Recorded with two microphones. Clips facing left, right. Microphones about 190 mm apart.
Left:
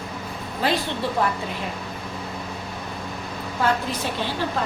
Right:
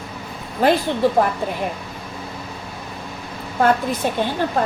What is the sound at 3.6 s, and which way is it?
A woman's voice, 50° right (ahead or behind).